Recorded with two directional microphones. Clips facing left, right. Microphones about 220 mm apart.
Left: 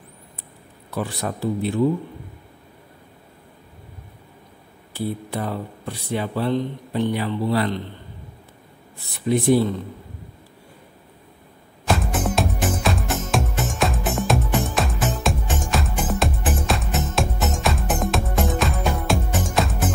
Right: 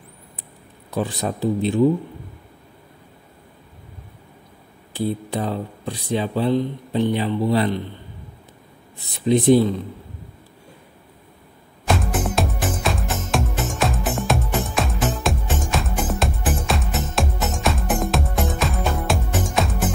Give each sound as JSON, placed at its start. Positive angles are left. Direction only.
{"t": 0.8, "sound": "a man's voice", "side_deg": -20}
{"t": 4.9, "sound": "speech", "side_deg": -20}
{"t": 9.1, "sound": "a man's voice", "side_deg": -20}
{"t": 11.9, "sound": "music", "side_deg": 0}